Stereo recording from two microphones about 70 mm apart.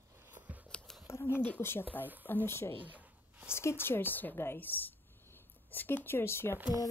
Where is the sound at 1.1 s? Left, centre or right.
Left.